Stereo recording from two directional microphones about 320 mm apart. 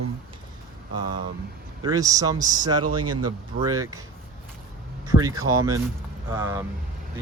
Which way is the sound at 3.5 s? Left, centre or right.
Centre.